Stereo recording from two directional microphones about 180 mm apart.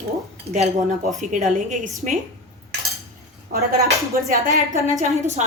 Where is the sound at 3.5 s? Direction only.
60° right (ahead or behind).